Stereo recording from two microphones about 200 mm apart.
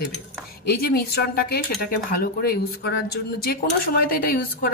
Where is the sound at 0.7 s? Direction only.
50° left (ahead or behind).